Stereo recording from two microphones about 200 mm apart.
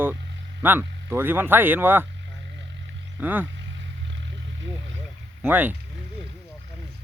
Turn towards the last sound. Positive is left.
turn(degrees=-10)  # may be behind; listen again after turning